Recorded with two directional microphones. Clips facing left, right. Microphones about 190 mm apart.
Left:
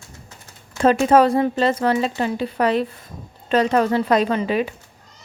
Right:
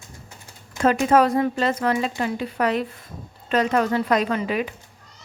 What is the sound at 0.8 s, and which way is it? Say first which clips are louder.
Speech: left 3 dB; 30° left (ahead or behind).